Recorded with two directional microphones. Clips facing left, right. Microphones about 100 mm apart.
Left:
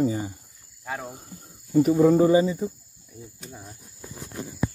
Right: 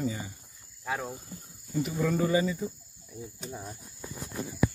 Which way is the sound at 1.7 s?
35° left (ahead or behind).